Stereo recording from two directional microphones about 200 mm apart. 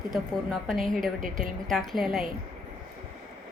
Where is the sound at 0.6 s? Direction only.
Centre (ahead or behind).